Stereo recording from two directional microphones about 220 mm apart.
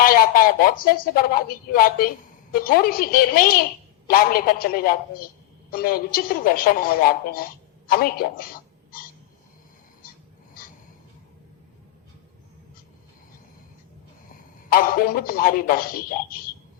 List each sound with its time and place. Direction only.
0.0 s a woman's voice: 40° left (ahead or behind)
14.7 s a woman's voice: 40° left (ahead or behind)